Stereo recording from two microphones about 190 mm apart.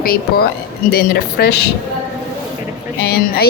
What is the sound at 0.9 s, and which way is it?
Speech, 55° left (ahead or behind).